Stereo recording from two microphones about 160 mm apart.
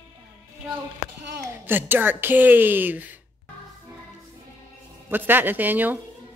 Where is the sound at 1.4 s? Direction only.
15° right (ahead or behind).